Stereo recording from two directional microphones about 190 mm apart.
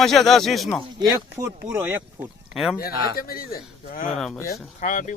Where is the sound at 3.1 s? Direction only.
50° left (ahead or behind).